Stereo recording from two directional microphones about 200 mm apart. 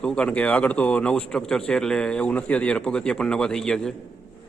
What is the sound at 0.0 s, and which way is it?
Speech, 5° left (ahead or behind).